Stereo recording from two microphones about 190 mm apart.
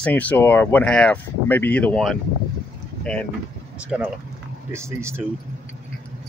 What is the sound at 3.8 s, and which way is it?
Speech, 5° right (ahead or behind).